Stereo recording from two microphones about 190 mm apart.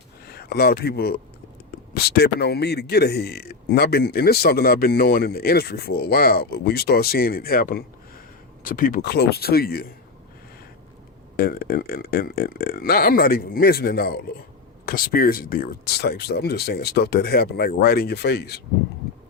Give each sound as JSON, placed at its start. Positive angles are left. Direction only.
{"t": 0.3, "sound": "speech", "side_deg": 55}
{"t": 11.3, "sound": "speech", "side_deg": 50}